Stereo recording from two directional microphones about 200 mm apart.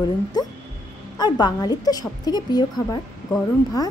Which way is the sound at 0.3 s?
20° left (ahead or behind).